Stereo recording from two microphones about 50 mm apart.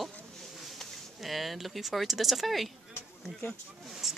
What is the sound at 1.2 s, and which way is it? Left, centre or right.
Speech, centre.